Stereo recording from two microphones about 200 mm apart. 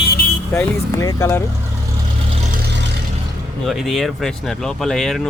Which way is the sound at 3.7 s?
Centre (ahead or behind).